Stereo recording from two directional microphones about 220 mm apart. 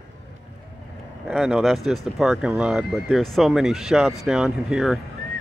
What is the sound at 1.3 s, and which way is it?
Speech, 5° right (ahead or behind).